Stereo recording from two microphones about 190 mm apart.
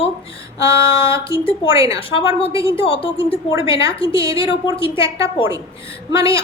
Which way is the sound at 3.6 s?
30° left (ahead or behind).